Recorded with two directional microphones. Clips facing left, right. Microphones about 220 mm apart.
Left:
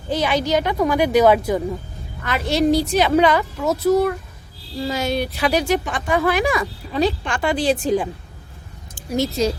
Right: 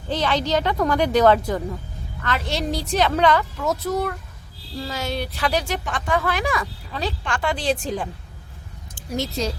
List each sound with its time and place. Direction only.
0.1 s a woman's voice: 10° left (ahead or behind)